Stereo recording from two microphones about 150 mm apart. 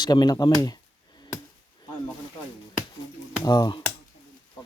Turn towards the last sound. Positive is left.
turn(degrees=30)  # may be behind; listen again after turning